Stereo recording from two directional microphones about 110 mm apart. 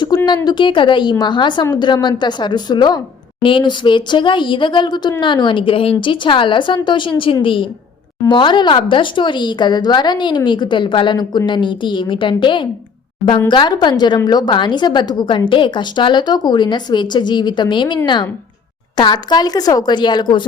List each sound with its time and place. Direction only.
0.3 s a woman's voice: 45° left (ahead or behind)